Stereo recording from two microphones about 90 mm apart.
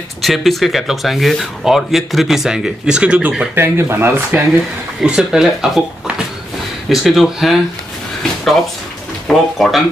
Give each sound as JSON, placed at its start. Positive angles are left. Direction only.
{"t": 0.2, "sound": "speech", "side_deg": 0}
{"t": 3.5, "sound": "speech", "side_deg": -25}
{"t": 5.0, "sound": "speech", "side_deg": -10}
{"t": 9.3, "sound": "speech", "side_deg": 0}